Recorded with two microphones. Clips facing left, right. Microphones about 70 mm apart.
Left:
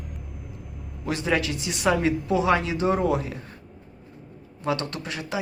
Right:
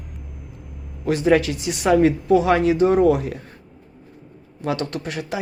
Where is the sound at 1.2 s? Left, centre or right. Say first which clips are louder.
Right 8 dB; right.